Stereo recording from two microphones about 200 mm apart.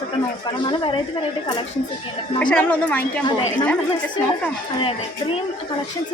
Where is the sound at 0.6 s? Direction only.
25° left (ahead or behind).